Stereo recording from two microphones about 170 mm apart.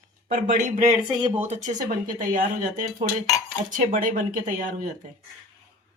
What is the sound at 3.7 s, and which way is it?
Speech, 50° right (ahead or behind).